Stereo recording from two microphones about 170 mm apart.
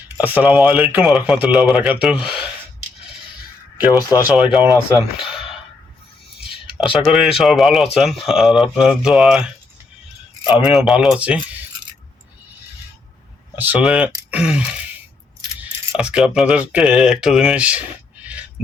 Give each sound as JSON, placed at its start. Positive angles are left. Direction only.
{"t": 0.2, "sound": "speech", "side_deg": -10}
{"t": 3.9, "sound": "speech", "side_deg": 20}
{"t": 4.3, "sound": "speech", "side_deg": -5}
{"t": 5.2, "sound": "a sound", "side_deg": -5}
{"t": 6.9, "sound": "speech", "side_deg": -5}
{"t": 10.4, "sound": "speech", "side_deg": -5}
{"t": 13.6, "sound": "speech", "side_deg": -10}